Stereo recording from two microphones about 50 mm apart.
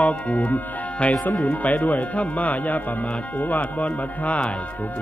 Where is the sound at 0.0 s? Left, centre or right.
Left.